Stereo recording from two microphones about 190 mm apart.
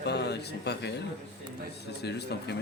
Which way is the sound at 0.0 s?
60° left (ahead or behind).